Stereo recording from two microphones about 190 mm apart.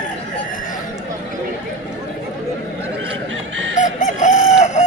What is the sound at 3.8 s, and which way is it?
Chicken, 40° left (ahead or behind).